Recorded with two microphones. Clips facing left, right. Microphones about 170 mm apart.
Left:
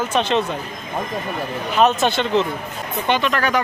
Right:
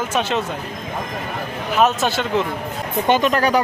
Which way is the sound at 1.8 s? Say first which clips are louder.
Left 1 dB; 5° right (ahead or behind).